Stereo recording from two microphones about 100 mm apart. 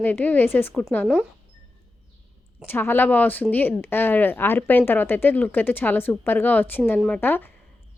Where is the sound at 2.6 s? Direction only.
20° left (ahead or behind).